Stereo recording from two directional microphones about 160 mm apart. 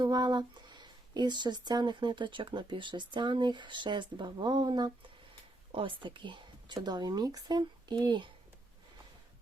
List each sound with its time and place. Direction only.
0.0 s speech: 25° right (ahead or behind)